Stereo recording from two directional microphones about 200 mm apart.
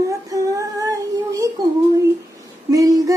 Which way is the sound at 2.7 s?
15° right (ahead or behind).